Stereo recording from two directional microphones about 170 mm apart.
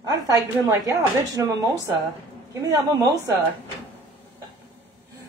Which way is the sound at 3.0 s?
20° right (ahead or behind).